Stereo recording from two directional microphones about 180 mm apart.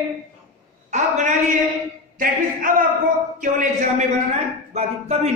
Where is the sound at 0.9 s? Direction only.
40° right (ahead or behind).